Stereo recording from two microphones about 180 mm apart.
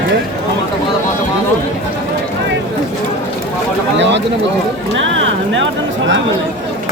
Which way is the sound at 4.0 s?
80° right.